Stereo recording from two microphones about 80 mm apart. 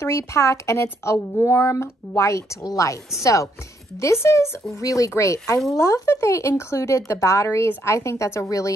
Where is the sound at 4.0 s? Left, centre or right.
Left.